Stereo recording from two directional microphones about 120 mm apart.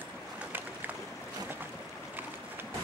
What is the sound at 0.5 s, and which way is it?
Boat, 15° right (ahead or behind).